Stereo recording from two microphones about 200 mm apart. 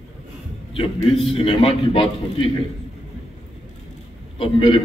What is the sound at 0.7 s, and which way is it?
A man's voice, 30° left (ahead or behind).